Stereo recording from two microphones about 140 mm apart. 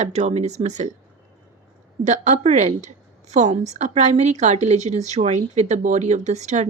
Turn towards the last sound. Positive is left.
turn(degrees=-55)  # may be behind; listen again after turning